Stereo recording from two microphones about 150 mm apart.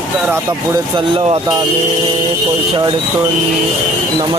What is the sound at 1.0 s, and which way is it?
Speech, 35° right (ahead or behind).